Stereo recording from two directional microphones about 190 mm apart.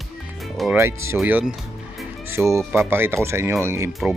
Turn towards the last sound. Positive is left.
turn(degrees=-15)  # may be behind; listen again after turning